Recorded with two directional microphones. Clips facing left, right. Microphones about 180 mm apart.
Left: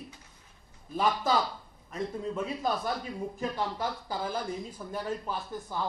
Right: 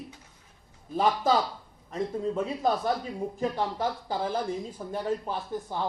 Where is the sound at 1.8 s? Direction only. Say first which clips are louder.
Right 4 dB; 35° right (ahead or behind).